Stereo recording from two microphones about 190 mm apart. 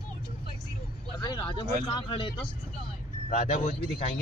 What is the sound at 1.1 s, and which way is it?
Speech, 25° left (ahead or behind).